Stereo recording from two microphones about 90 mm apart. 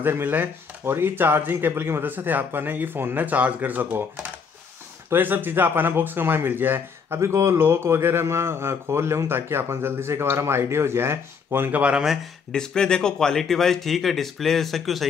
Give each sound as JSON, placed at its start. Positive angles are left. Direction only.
{"t": 0.0, "sound": "speech", "side_deg": -20}
{"t": 12.5, "sound": "speech", "side_deg": 10}